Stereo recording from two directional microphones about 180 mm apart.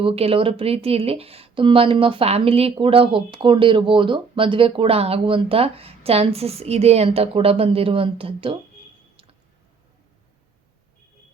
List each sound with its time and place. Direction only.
0.0 s speech: 30° right (ahead or behind)